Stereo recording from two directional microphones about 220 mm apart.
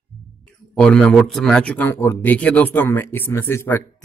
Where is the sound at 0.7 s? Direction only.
5° left (ahead or behind).